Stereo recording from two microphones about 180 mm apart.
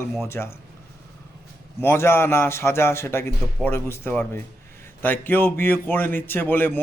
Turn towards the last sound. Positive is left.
turn(degrees=10)  # may be behind; listen again after turning